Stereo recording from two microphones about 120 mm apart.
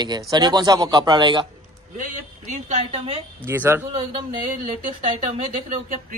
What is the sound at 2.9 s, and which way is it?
Speech, 50° right (ahead or behind).